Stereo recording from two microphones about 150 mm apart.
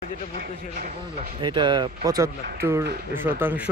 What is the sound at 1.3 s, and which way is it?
Speech, 30° right (ahead or behind).